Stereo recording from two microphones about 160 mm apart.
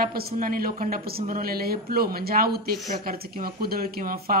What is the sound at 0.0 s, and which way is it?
Speech, 70° right (ahead or behind).